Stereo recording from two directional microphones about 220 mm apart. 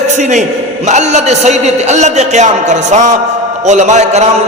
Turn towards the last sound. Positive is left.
turn(degrees=-30)  # may be behind; listen again after turning